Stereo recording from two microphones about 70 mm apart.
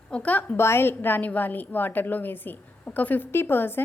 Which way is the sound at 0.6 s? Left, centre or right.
Left.